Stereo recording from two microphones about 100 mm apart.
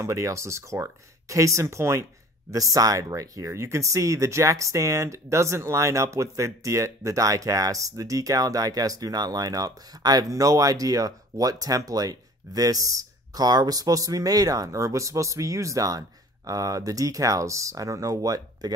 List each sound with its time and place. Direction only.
0.0 s speech: 30° right (ahead or behind)